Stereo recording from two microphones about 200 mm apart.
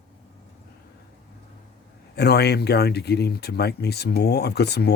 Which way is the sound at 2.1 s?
55° left (ahead or behind).